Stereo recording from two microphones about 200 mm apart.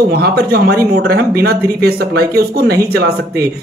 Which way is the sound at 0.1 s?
50° right (ahead or behind).